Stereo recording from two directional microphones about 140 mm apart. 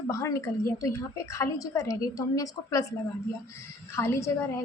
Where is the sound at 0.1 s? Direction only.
25° left (ahead or behind).